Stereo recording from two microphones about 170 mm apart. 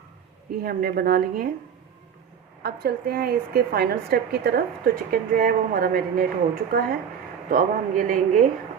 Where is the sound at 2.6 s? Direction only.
65° right (ahead or behind).